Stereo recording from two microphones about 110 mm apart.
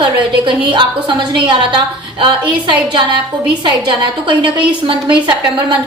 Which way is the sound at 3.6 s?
45° right (ahead or behind).